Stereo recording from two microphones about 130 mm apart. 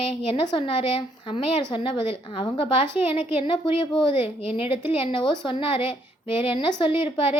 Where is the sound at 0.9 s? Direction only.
45° left (ahead or behind).